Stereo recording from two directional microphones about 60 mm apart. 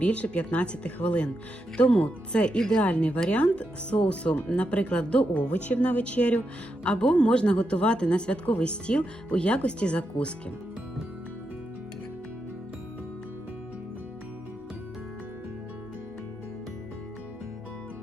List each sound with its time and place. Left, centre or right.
0.0 s speech: centre